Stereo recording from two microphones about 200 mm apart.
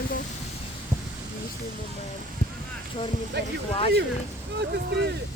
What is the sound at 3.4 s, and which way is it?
Speech, 55° right (ahead or behind).